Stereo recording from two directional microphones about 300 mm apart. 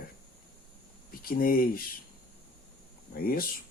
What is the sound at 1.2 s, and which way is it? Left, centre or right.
Speech, left.